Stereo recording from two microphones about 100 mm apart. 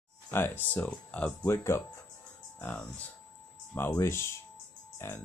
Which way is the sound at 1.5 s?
25° left (ahead or behind).